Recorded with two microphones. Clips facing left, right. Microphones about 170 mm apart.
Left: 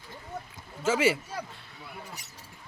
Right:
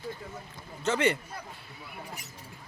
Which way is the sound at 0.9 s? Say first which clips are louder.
Left 2 dB; 5° left (ahead or behind).